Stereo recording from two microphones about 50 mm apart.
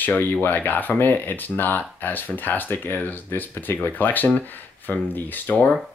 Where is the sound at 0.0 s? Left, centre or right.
Left.